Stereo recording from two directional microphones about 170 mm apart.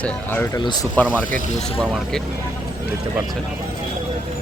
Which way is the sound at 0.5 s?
25° left (ahead or behind).